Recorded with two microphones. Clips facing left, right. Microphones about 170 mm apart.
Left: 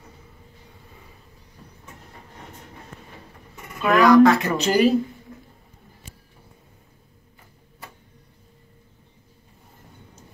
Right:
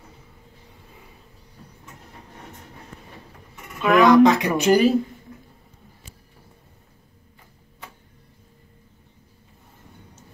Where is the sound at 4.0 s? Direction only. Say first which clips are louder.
Even; 20° right (ahead or behind).